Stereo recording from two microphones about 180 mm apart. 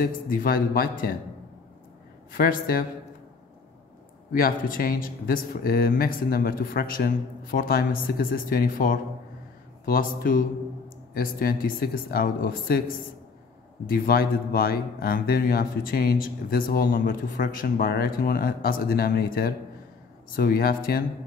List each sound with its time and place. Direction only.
0.0 s speech: 55° left (ahead or behind)
2.3 s speech: 50° left (ahead or behind)
4.3 s speech: 50° left (ahead or behind)